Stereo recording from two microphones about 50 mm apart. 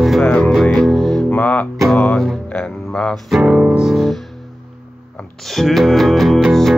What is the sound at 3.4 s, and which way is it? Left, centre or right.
Music, centre.